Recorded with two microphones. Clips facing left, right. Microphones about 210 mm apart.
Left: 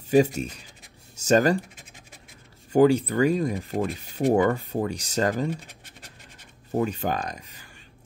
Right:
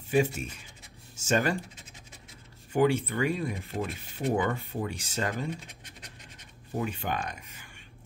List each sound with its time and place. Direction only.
0.1 s speech: 40° left (ahead or behind)
2.7 s speech: 40° left (ahead or behind)
6.7 s speech: 40° left (ahead or behind)